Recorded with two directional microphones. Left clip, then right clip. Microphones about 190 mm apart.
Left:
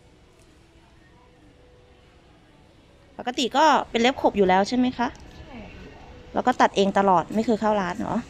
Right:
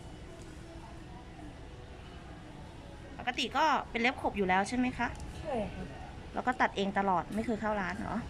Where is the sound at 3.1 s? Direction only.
30° left (ahead or behind).